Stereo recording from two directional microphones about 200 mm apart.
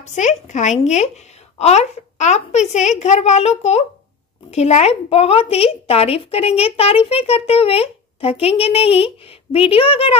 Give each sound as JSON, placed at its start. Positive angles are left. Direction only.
{"t": 0.0, "sound": "a woman's voice", "side_deg": 35}